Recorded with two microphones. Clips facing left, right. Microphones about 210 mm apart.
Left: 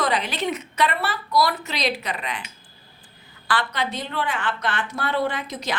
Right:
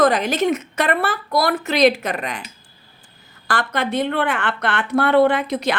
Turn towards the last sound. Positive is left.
turn(degrees=-60)  # may be behind; listen again after turning